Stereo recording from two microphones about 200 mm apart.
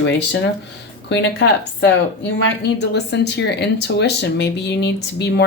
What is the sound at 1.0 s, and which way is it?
A woman's voice, 60° left (ahead or behind).